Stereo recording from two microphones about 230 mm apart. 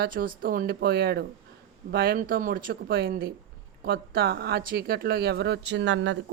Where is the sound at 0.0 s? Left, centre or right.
Right.